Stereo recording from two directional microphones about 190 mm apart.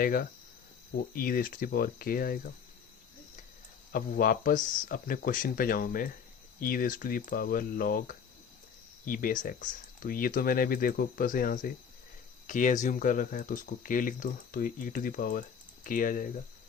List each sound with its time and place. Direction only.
0.0 s speech: 50° left (ahead or behind)
3.9 s speech: 50° left (ahead or behind)